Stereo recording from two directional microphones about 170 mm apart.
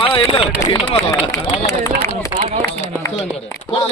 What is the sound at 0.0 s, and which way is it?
Speech, 30° left (ahead or behind).